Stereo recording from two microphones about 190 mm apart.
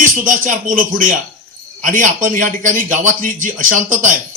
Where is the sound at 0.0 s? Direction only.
40° right (ahead or behind).